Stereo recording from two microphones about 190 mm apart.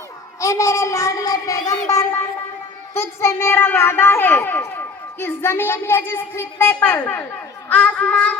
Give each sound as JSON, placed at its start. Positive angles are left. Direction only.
{"t": 0.3, "sound": "a child's voice", "side_deg": 15}
{"t": 1.9, "sound": "music", "side_deg": 15}
{"t": 2.9, "sound": "a child's voice", "side_deg": 15}